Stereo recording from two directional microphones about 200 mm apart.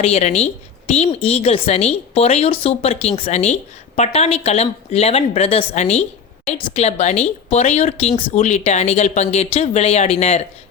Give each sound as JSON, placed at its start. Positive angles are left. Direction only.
{"t": 0.0, "sound": "a woman's voice", "side_deg": 30}